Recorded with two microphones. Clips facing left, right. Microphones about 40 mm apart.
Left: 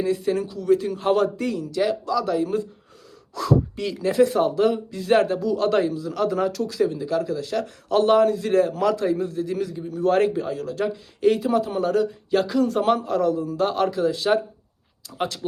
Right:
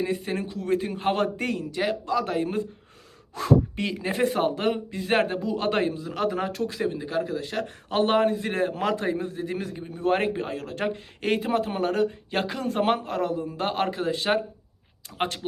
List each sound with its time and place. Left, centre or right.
0.0 s speech: right
10.4 s speech: right